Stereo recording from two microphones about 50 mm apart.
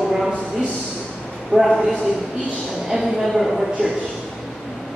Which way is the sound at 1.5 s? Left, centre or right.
Centre.